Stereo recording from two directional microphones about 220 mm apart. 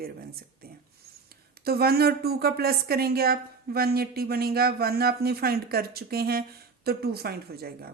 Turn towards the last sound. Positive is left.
turn(degrees=-45)  # may be behind; listen again after turning